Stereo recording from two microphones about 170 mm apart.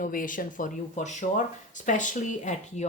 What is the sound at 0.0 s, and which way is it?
Speech, 55° left (ahead or behind).